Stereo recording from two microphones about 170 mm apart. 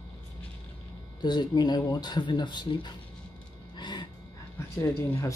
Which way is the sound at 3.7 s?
25° left (ahead or behind).